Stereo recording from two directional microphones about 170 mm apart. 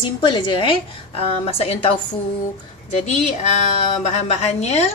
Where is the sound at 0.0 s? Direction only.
25° left (ahead or behind).